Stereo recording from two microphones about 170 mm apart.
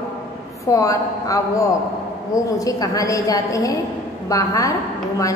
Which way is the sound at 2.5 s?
20° left (ahead or behind).